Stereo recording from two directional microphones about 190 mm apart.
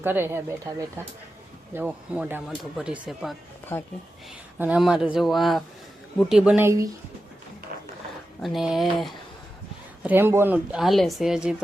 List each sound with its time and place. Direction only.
0.0 s speech: 10° right (ahead or behind)
3.7 s speech: 10° left (ahead or behind)
4.5 s speech: 10° right (ahead or behind)
8.4 s speech: centre (ahead or behind)